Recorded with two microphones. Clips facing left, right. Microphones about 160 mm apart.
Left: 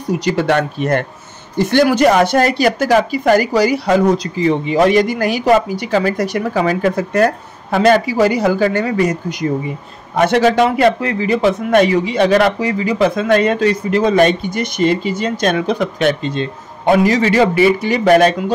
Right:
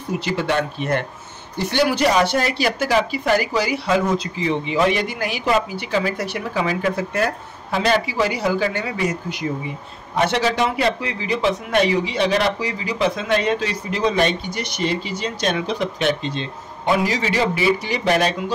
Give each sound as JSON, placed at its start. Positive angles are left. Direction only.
{"t": 0.5, "sound": "a man's voice", "side_deg": 55}